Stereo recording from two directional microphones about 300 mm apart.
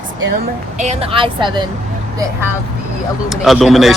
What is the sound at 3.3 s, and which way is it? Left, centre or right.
Speech, centre.